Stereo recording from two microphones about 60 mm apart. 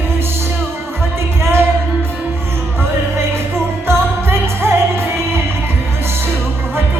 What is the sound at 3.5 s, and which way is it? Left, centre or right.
Music, right.